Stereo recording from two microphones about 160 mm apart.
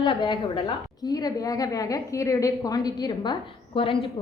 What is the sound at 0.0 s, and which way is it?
A woman's voice, 35° left (ahead or behind).